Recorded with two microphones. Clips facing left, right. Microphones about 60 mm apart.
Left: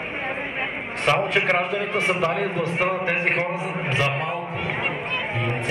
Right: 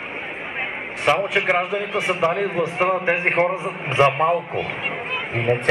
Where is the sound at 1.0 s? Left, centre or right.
Centre.